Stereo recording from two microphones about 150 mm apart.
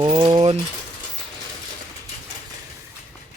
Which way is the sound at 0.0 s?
35° right (ahead or behind).